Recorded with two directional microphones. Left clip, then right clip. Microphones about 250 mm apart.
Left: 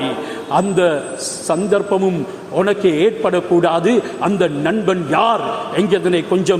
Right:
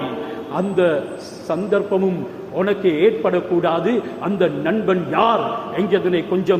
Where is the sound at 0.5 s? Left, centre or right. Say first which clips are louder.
Left 3 dB; left.